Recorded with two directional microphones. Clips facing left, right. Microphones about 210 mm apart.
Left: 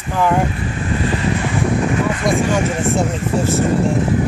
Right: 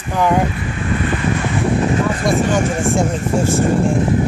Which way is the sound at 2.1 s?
40° right (ahead or behind).